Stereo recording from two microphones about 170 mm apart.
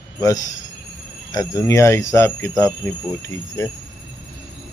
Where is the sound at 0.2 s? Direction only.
20° left (ahead or behind).